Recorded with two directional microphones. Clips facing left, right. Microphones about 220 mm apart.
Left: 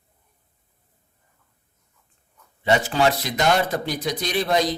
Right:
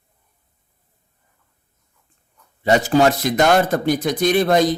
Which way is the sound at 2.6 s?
40° right (ahead or behind).